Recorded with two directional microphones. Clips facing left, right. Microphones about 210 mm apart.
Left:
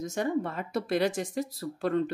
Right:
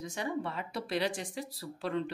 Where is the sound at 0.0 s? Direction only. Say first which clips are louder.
Left 6 dB; 45° left (ahead or behind).